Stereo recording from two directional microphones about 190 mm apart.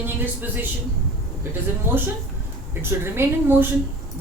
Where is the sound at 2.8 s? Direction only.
10° right (ahead or behind).